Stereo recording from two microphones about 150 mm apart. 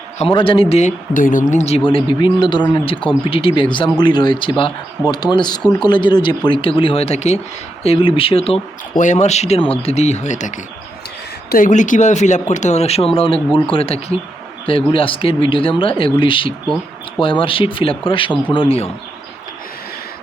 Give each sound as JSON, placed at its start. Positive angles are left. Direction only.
{"t": 0.2, "sound": "speech", "side_deg": 35}
{"t": 7.9, "sound": "speech", "side_deg": 35}
{"t": 9.0, "sound": "speech", "side_deg": 50}
{"t": 11.4, "sound": "speech", "side_deg": 65}